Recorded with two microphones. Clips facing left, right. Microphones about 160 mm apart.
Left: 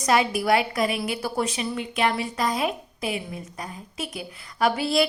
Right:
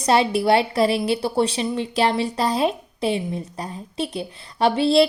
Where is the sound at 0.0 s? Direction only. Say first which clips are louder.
Right 4 dB; 30° right (ahead or behind).